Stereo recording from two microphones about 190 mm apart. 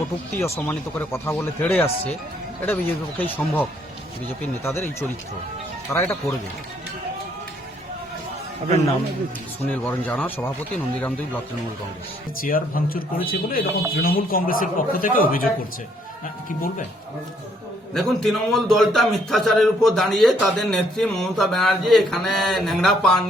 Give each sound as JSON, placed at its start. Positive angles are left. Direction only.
{"t": 0.3, "sound": "speech", "side_deg": 15}
{"t": 3.2, "sound": "speech", "side_deg": 10}
{"t": 9.6, "sound": "speech", "side_deg": 5}
{"t": 12.4, "sound": "speech", "side_deg": 50}
{"t": 17.9, "sound": "a man's voice", "side_deg": 0}